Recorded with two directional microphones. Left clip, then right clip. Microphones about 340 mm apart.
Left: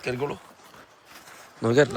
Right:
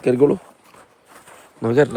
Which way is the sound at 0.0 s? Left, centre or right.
Centre.